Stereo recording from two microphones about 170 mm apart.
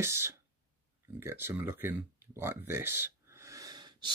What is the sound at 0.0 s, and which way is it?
Speech, 15° right (ahead or behind).